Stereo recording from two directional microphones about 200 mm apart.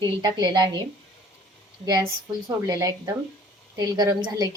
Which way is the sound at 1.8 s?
20° right (ahead or behind).